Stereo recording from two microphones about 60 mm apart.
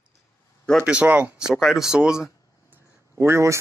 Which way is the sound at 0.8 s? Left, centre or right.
Right.